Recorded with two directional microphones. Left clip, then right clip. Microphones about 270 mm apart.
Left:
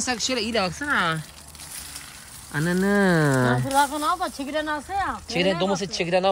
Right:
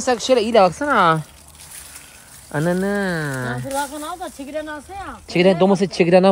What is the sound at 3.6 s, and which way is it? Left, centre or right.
Speech, left.